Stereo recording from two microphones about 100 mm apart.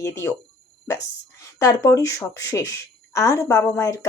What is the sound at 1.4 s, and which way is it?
Speech, 30° left (ahead or behind).